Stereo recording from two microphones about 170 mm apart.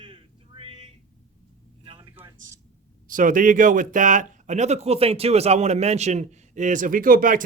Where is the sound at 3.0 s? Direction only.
50° right (ahead or behind).